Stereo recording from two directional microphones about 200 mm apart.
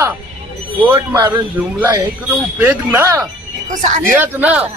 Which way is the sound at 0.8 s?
15° right (ahead or behind).